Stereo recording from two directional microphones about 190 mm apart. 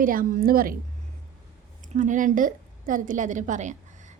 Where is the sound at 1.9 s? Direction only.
40° right (ahead or behind).